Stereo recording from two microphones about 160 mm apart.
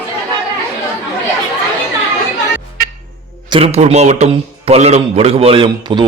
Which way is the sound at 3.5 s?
35° right (ahead or behind).